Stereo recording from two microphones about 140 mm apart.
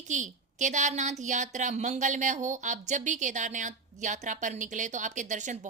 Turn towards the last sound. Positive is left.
turn(degrees=-60)  # may be behind; listen again after turning